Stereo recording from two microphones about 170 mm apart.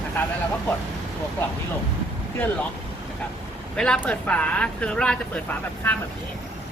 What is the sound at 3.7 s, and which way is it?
Speech, 5° left (ahead or behind).